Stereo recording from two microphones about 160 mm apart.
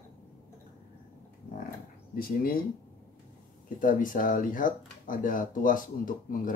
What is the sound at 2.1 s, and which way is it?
Speech, 65° left (ahead or behind).